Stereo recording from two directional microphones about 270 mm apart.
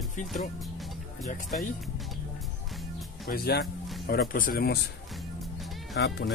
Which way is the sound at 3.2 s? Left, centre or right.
Left.